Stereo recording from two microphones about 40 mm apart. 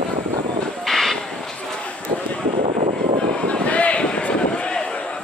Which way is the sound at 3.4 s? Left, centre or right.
Left.